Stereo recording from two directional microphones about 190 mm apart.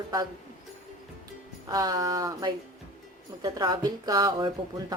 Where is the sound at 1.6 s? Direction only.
20° right (ahead or behind).